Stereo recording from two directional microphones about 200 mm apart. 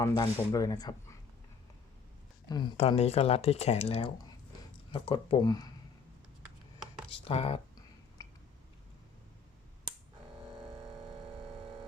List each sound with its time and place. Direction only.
0.0 s speech: 15° left (ahead or behind)
2.5 s speech: 20° left (ahead or behind)
7.1 s a sound: 25° left (ahead or behind)